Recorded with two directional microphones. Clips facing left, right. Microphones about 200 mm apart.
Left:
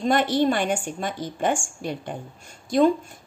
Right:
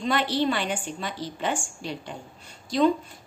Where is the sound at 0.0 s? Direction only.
50° left (ahead or behind).